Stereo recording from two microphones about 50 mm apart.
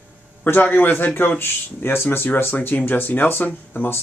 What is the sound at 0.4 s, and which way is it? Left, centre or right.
Speech, left.